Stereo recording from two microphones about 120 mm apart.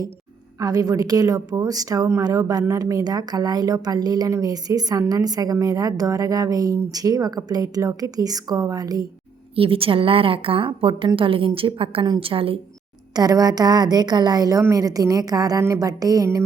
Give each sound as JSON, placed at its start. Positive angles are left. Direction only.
{"t": 0.6, "sound": "a woman's voice", "side_deg": -30}
{"t": 9.6, "sound": "a woman's voice", "side_deg": -50}
{"t": 13.1, "sound": "a woman's voice", "side_deg": -30}